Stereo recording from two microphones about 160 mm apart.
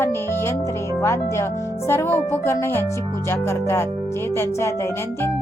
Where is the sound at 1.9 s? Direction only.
15° left (ahead or behind).